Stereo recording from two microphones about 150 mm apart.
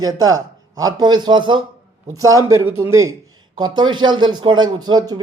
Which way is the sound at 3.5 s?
30° right (ahead or behind).